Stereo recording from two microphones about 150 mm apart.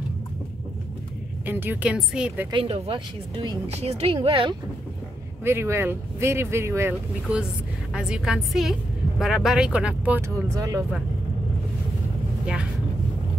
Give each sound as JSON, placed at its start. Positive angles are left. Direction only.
{"t": 1.4, "sound": "speech", "side_deg": -15}
{"t": 2.5, "sound": "speech", "side_deg": -40}
{"t": 3.7, "sound": "speech", "side_deg": -45}
{"t": 5.4, "sound": "a woman's voice", "side_deg": -15}
{"t": 10.5, "sound": "speech", "side_deg": -20}